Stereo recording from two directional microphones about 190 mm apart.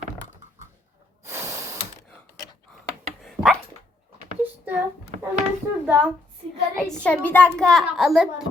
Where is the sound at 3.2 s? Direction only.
Centre (ahead or behind).